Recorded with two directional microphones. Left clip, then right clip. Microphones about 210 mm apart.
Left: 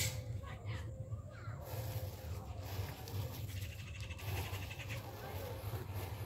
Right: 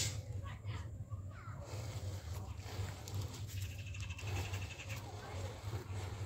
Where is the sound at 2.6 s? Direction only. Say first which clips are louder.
Even; 15° right (ahead or behind).